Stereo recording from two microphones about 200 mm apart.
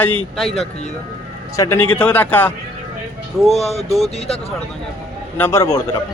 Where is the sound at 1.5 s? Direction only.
15° left (ahead or behind).